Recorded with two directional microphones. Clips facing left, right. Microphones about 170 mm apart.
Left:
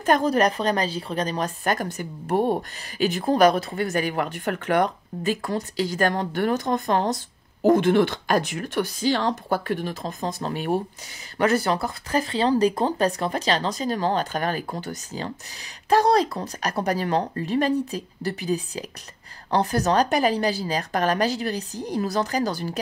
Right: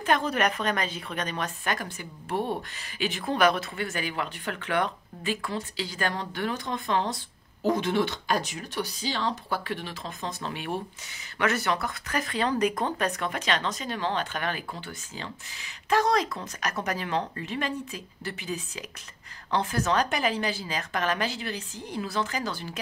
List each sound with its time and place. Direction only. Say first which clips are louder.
0.0 s speech: left 6 dB; 40° left (ahead or behind)